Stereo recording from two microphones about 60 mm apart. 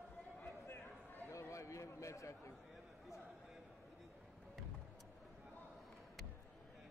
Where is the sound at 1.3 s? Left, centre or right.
Left.